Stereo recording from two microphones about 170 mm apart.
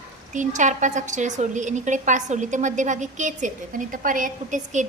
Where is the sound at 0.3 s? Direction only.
45° right (ahead or behind).